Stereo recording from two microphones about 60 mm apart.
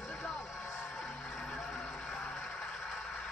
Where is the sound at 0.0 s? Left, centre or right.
Centre.